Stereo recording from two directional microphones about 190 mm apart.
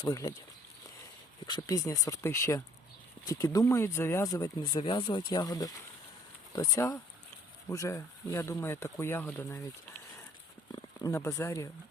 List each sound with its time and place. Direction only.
0.0 s speech: 20° left (ahead or behind)
1.5 s speech: 20° left (ahead or behind)
10.7 s speech: 15° left (ahead or behind)